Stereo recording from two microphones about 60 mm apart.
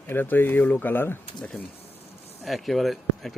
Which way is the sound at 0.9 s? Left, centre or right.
Left.